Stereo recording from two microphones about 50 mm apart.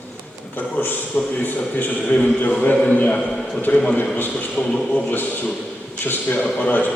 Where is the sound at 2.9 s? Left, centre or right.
Left.